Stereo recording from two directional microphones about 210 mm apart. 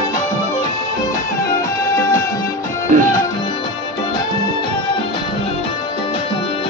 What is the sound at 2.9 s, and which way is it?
Music, 40° right (ahead or behind).